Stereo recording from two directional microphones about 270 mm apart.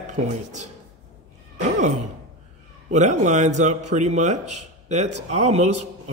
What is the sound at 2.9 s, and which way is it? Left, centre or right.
A man's voice, right.